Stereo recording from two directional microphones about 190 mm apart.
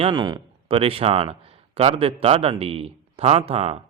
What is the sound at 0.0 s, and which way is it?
A man's voice, 25° right (ahead or behind).